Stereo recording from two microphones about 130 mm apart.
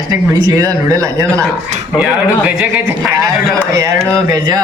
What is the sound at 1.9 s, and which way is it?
Speech, 5° right (ahead or behind).